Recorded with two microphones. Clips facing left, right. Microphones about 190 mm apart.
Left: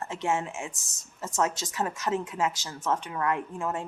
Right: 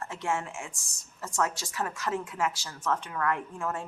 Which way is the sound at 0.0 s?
20° left (ahead or behind).